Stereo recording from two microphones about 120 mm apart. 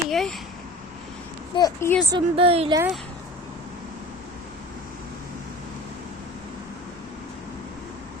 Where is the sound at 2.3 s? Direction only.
55° right (ahead or behind).